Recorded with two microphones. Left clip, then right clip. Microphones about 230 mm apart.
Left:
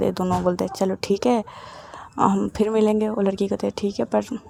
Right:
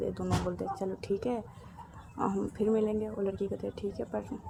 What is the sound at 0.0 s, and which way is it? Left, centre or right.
Speech, left.